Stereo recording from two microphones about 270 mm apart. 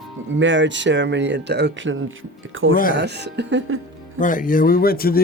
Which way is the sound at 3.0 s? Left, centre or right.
Right.